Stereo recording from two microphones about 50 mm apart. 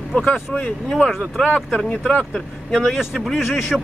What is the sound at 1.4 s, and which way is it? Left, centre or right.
A man's voice, centre.